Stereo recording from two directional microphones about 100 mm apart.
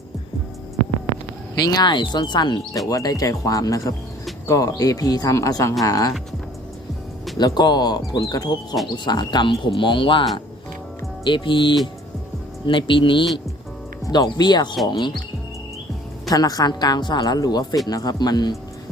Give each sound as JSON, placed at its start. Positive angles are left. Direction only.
{"t": 1.6, "sound": "speech", "side_deg": 45}
{"t": 2.8, "sound": "a woman's voice", "side_deg": 35}
{"t": 7.3, "sound": "speech", "side_deg": 45}
{"t": 14.0, "sound": "speech", "side_deg": 40}
{"t": 16.3, "sound": "a woman's voice", "side_deg": 40}